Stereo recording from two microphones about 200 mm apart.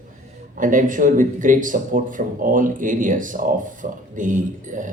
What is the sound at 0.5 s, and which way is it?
Speech, 40° right (ahead or behind).